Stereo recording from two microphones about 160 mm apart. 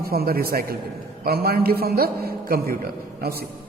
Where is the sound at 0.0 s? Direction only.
70° right (ahead or behind).